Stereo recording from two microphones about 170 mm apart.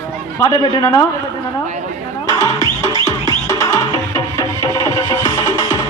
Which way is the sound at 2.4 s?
20° left (ahead or behind).